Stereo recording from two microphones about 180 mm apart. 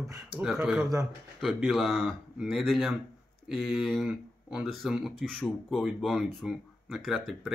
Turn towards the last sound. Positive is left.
turn(degrees=0)  # may be behind; listen again after turning